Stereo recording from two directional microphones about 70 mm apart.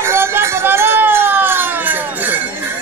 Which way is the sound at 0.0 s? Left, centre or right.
Right.